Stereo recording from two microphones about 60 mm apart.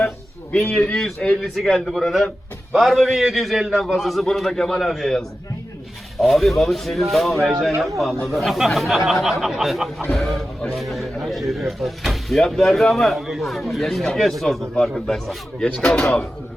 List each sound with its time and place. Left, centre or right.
0.5 s a man's voice: left
1.9 s speech: centre